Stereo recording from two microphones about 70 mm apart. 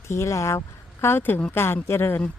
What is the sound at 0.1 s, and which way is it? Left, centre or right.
Speech, left.